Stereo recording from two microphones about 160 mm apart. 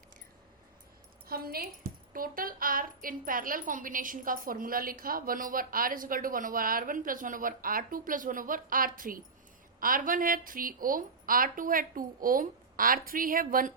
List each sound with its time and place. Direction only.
1.3 s a woman's voice: 70° right (ahead or behind)